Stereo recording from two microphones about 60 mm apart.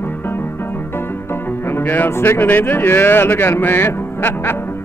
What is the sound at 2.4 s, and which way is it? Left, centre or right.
Speech, left.